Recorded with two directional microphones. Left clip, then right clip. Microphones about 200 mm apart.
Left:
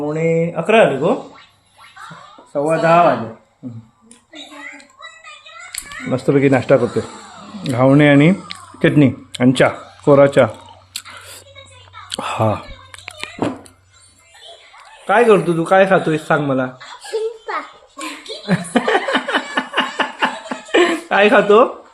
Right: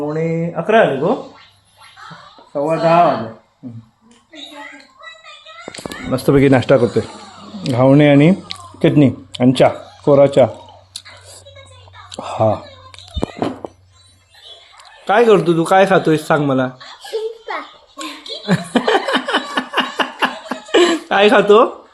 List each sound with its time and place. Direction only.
0.0 s speech: centre (ahead or behind)
2.5 s speech: 10° left (ahead or behind)
5.7 s a sound: 10° left (ahead or behind)
6.2 s a man's voice: 20° right (ahead or behind); by 10.5 s 5° left (ahead or behind)
10.9 s whispering: 15° left (ahead or behind)
15.0 s a man's voice: 25° right (ahead or behind)
17.0 s giggle: centre (ahead or behind)
18.2 s a sound: centre (ahead or behind)
18.4 s laughter: 20° right (ahead or behind)